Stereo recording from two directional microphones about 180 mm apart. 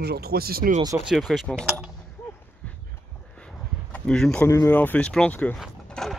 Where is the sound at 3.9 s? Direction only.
5° left (ahead or behind).